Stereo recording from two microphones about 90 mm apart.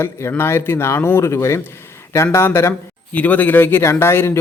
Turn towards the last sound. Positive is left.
turn(degrees=30)  # may be behind; listen again after turning